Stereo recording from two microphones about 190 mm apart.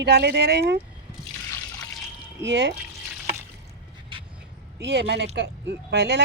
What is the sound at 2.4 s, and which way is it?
Speech, 70° right (ahead or behind).